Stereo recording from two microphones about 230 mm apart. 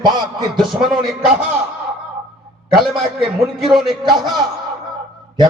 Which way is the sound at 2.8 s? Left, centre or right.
Centre.